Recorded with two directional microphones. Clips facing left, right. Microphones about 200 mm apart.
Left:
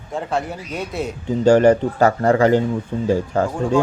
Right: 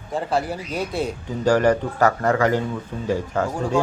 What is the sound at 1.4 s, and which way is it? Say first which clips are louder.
Speech: left 5 dB; 25° left (ahead or behind).